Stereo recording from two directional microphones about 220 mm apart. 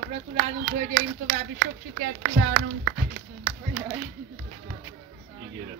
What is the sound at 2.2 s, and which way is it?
Speech, 60° right (ahead or behind).